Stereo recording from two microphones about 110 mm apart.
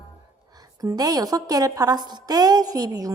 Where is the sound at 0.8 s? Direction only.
35° right (ahead or behind).